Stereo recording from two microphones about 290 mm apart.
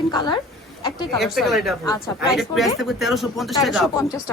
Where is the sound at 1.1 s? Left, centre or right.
Centre.